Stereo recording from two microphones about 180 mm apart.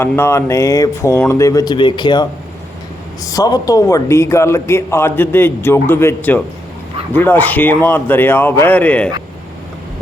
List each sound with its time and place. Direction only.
0.0 s a man's voice: 15° left (ahead or behind)
3.2 s a man's voice: 20° left (ahead or behind)